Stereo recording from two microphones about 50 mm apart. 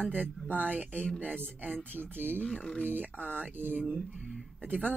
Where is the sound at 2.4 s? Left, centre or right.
Left.